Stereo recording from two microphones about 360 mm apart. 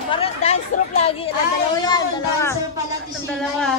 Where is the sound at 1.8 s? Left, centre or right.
Centre.